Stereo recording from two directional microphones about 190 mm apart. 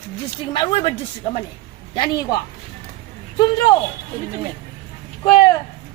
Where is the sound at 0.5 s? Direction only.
30° left (ahead or behind).